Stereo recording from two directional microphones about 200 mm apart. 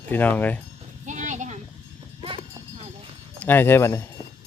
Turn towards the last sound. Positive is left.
turn(degrees=15)  # may be behind; listen again after turning